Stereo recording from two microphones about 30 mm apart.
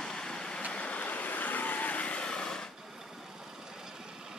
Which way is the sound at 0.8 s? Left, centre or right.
Left.